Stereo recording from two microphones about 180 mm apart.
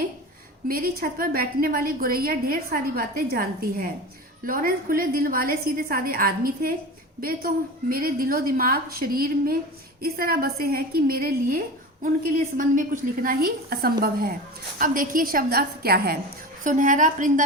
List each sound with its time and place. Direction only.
0.7 s a woman's voice: 55° right (ahead or behind)
16.6 s a woman's voice: 45° right (ahead or behind)